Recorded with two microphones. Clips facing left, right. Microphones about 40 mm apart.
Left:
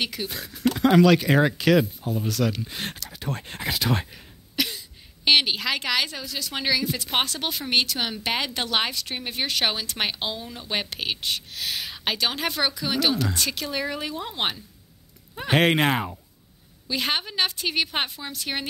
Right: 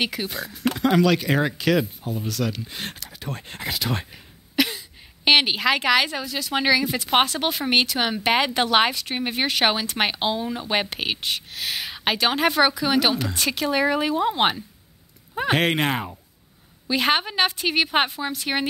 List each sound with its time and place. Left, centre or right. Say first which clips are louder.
0.0 s speech: right 3 dB; centre
0.3 s speech: even; centre
4.1 s speech: right 1 dB; centre
15.5 s speech: left 2 dB; centre
16.8 s a woman's voice: right 5 dB; centre